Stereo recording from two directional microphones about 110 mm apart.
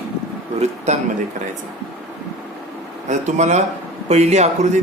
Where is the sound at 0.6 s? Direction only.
90° right.